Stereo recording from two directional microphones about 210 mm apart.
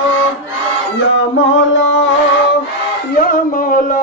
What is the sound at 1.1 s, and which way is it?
Music, 70° left (ahead or behind).